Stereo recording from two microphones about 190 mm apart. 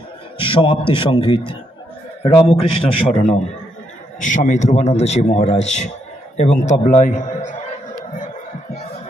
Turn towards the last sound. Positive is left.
turn(degrees=40)  # may be behind; listen again after turning